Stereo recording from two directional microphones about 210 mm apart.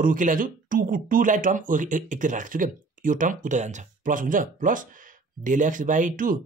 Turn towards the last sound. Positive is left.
turn(degrees=-40)  # may be behind; listen again after turning